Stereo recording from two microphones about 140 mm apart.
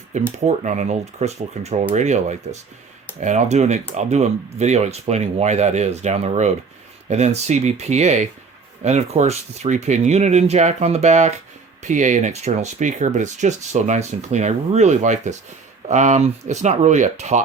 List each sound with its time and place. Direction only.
0.1 s speech: 55° right (ahead or behind)